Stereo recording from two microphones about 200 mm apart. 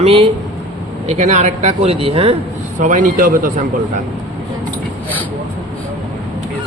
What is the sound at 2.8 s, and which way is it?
Speech, 40° right (ahead or behind).